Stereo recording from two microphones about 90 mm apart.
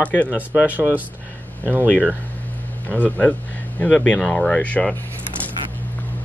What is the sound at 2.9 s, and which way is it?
Speech, 15° left (ahead or behind).